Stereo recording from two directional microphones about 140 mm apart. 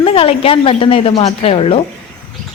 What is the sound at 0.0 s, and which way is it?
A woman's voice, 40° left (ahead or behind).